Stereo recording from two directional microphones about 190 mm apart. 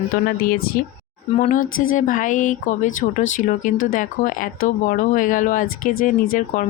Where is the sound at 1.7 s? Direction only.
90° left.